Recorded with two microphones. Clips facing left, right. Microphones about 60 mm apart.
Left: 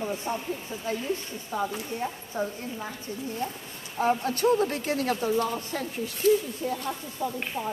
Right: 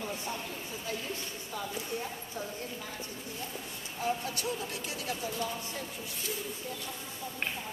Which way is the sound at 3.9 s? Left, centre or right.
Left.